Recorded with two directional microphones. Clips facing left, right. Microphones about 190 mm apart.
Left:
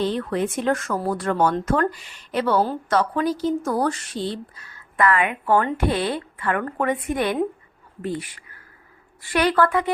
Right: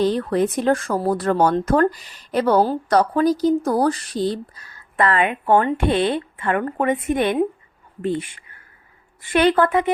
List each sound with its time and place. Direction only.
0.0 s a woman's voice: 40° right (ahead or behind); by 9.9 s 20° right (ahead or behind)